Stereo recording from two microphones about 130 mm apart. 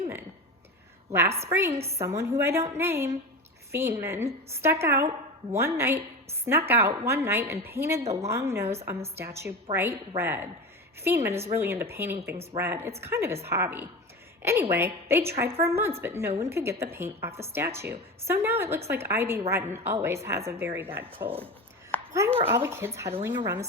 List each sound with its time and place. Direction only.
1.1 s a woman's voice: 20° right (ahead or behind)
8.0 s a woman's voice: 55° right (ahead or behind)
8.3 s a woman's voice: 20° right (ahead or behind)
9.7 s a woman's voice: 45° right (ahead or behind)
10.2 s a woman's voice: 20° right (ahead or behind)